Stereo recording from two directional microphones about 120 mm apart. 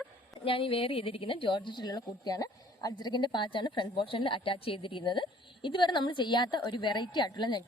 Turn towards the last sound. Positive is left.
turn(degrees=35)  # may be behind; listen again after turning